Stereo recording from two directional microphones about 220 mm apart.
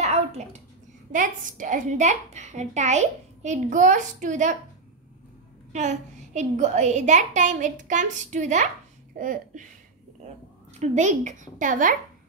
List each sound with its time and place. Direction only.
0.0 s a sound: 30° right (ahead or behind)
1.1 s a woman's voice: 35° right (ahead or behind)
5.7 s a woman's voice: 30° right (ahead or behind)
10.8 s a woman's voice: 35° right (ahead or behind)